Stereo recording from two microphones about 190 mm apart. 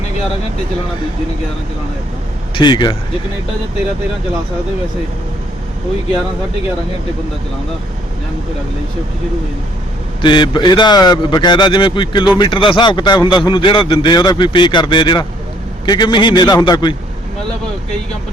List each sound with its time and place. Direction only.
2.6 s a man's voice: 25° left (ahead or behind)
10.2 s a man's voice: 25° left (ahead or behind)